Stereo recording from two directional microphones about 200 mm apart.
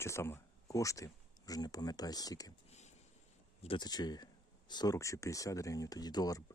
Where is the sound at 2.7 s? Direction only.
35° left (ahead or behind).